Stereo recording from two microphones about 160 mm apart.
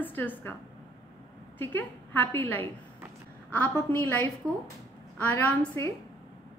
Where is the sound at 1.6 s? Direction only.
10° left (ahead or behind).